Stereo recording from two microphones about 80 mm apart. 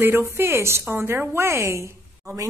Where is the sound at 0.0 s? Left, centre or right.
Right.